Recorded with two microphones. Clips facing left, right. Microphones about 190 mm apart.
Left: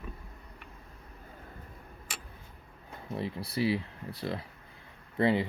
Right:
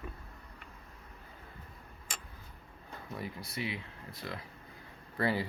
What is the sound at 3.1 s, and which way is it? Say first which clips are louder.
Speech: left 7 dB; 30° left (ahead or behind).